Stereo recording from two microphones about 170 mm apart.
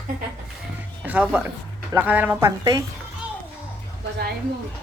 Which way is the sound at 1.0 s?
10° right (ahead or behind).